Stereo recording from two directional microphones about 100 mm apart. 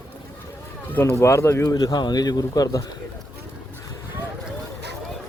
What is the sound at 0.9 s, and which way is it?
Speech, 20° left (ahead or behind).